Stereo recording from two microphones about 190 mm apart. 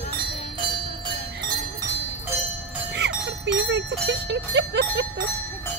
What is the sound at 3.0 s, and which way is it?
Bell, 65° right (ahead or behind).